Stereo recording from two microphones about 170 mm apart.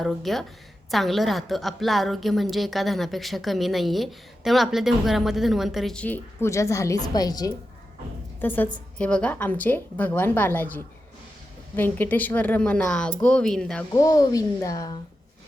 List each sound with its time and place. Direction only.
0.0 s a woman's voice: centre (ahead or behind); by 7.5 s 20° left (ahead or behind)
8.4 s a woman's voice: 10° left (ahead or behind)
11.8 s a woman's voice: 10° left (ahead or behind)
13.9 s a woman's voice: 20° left (ahead or behind)